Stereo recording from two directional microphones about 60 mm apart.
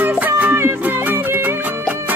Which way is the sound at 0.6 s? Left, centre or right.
Right.